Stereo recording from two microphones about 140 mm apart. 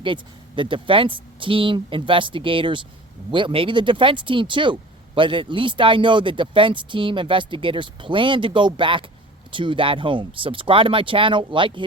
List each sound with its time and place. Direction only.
0.0 s speech: 35° right (ahead or behind)